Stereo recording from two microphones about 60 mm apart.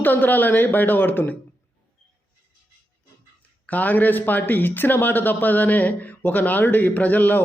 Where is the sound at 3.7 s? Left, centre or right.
Left.